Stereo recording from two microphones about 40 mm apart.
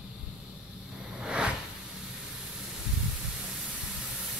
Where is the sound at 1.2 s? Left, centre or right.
Centre.